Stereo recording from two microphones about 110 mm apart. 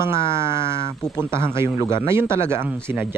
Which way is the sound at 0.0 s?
25° right (ahead or behind).